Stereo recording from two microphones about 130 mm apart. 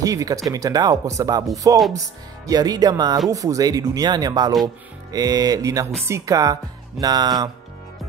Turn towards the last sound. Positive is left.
turn(degrees=-30)  # may be behind; listen again after turning